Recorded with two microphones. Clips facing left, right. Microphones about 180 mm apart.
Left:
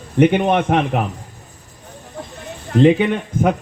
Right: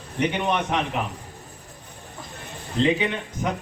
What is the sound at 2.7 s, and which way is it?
Speech, 55° left (ahead or behind).